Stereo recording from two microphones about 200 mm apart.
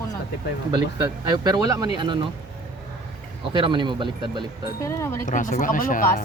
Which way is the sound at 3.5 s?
25° right (ahead or behind).